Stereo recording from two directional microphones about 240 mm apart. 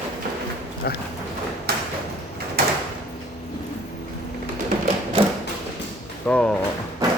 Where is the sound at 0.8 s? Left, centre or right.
Left.